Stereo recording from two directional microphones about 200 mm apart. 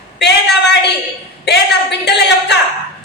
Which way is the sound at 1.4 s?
55° left (ahead or behind).